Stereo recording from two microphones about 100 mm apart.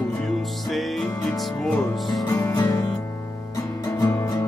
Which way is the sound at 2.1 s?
40° left (ahead or behind).